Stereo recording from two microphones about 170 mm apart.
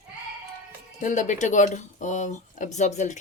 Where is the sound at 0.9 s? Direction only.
50° left (ahead or behind).